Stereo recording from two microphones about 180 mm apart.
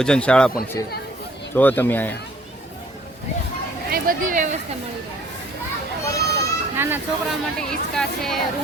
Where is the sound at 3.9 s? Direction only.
50° right (ahead or behind).